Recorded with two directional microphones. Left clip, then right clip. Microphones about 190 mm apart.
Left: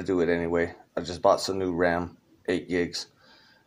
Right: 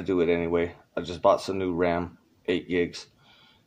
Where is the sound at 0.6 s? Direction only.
20° right (ahead or behind).